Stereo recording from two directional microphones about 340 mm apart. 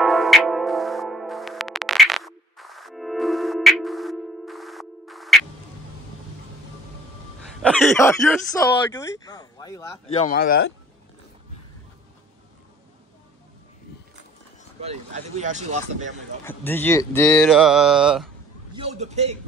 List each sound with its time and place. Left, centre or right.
0.0 s music: centre
7.6 s speech: centre; by 10.7 s left
14.8 s speech: centre
16.4 s speech: centre
18.7 s speech: centre